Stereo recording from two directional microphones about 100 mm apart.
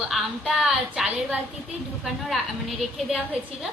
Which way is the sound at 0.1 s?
Centre (ahead or behind).